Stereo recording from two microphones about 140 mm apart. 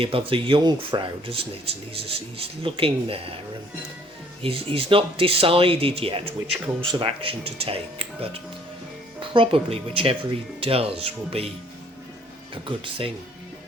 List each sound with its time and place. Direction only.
0.0 s speech: 40° right (ahead or behind)
4.4 s speech: 40° right (ahead or behind)
12.6 s speech: 40° right (ahead or behind)